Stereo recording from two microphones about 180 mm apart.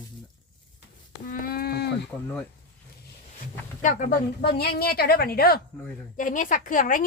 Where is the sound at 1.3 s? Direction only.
55° left (ahead or behind).